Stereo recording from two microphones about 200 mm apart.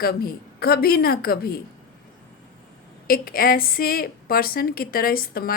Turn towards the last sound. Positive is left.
turn(degrees=50)  # may be behind; listen again after turning